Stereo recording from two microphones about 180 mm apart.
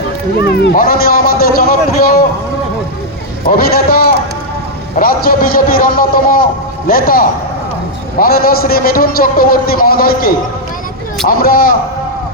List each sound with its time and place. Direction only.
0.4 s a man's voice: 65° left (ahead or behind)
3.5 s a man's voice: 55° left (ahead or behind)